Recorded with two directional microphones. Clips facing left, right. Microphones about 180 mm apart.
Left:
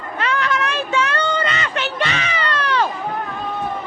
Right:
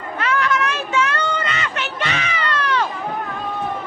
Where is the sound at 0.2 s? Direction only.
30° left (ahead or behind).